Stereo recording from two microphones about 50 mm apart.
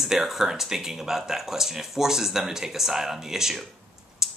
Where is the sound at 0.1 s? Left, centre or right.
Centre.